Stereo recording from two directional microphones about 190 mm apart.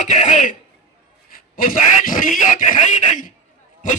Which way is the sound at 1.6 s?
45° left (ahead or behind).